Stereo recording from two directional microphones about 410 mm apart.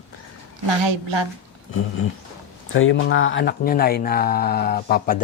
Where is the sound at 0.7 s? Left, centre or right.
Right.